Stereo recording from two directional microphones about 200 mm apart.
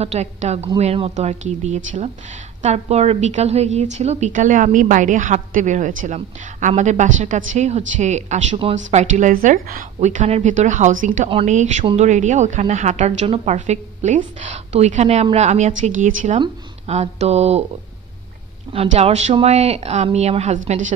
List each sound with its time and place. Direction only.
0.0 s a woman's voice: 35° right (ahead or behind)
18.7 s a woman's voice: 30° right (ahead or behind)